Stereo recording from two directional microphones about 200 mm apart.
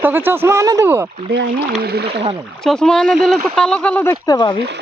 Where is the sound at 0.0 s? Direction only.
10° right (ahead or behind).